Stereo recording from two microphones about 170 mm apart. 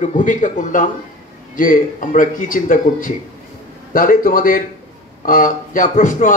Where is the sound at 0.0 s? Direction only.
50° left (ahead or behind).